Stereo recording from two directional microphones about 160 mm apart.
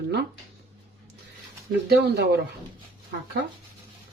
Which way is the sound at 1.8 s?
90° right.